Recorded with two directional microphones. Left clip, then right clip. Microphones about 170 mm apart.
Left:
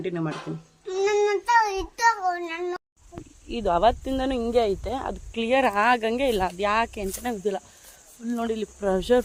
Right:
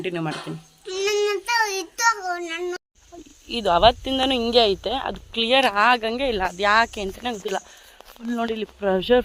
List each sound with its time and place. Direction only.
0.0 s speech: 5° right (ahead or behind)
0.9 s child singing: 35° left (ahead or behind)
3.5 s speech: 5° left (ahead or behind)
5.7 s speech: 20° left (ahead or behind)
6.5 s speech: 5° left (ahead or behind)
8.3 s speech: 20° right (ahead or behind)